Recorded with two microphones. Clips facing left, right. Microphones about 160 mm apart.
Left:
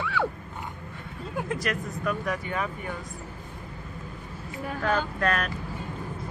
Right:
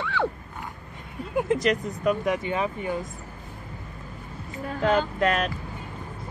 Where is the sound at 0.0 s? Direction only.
5° left (ahead or behind).